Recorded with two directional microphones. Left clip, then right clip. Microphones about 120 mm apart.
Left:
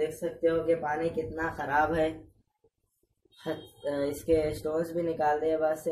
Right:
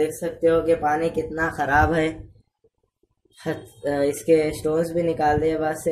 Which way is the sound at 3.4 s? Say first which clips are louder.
Right 7 dB; 40° right (ahead or behind).